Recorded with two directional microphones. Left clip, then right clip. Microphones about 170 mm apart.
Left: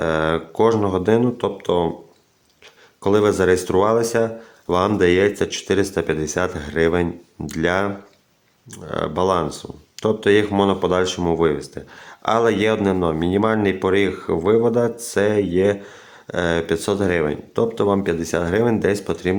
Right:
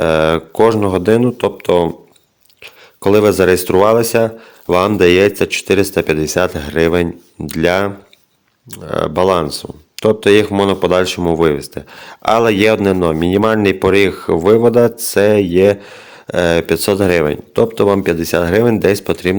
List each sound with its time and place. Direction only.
0.0 s speech: 30° right (ahead or behind)
3.0 s speech: 30° right (ahead or behind)